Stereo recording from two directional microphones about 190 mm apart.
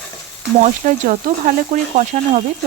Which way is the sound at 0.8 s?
45° right (ahead or behind).